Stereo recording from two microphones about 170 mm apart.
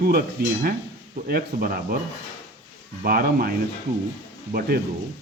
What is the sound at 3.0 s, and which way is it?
Speech, 60° right (ahead or behind).